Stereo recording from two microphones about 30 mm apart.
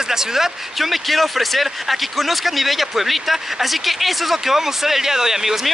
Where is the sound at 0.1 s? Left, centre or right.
Centre.